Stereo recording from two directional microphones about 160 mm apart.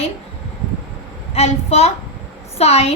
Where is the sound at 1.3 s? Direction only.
40° left (ahead or behind).